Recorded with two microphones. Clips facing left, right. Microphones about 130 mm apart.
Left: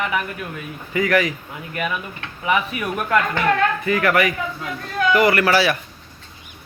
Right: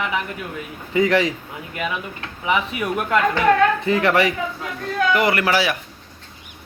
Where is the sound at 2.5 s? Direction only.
20° right (ahead or behind).